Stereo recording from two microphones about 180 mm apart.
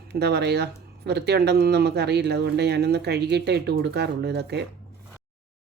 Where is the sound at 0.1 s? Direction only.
65° right (ahead or behind).